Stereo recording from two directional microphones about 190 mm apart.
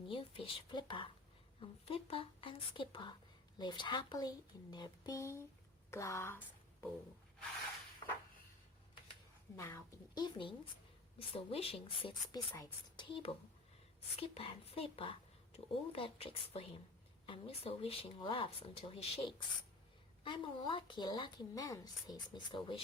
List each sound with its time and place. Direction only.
0.1 s a woman's voice: 30° left (ahead or behind); by 6.4 s 15° left (ahead or behind)
8.0 s a sound: 25° left (ahead or behind)
9.6 s a woman's voice: 15° left (ahead or behind)